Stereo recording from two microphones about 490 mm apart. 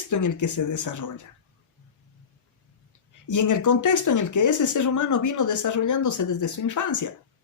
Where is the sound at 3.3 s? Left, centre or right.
Left.